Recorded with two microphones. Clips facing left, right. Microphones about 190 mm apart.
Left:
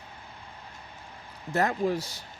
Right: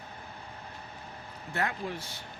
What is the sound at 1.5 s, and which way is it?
Speech, 40° left (ahead or behind).